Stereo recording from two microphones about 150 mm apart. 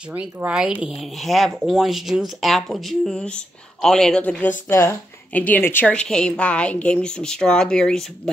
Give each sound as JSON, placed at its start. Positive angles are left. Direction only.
{"t": 0.1, "sound": "a woman's voice", "side_deg": -10}